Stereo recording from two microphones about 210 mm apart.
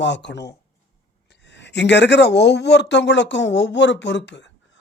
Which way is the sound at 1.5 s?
55° left (ahead or behind).